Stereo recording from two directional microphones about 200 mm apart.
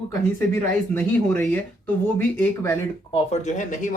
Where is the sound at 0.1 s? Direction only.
10° left (ahead or behind).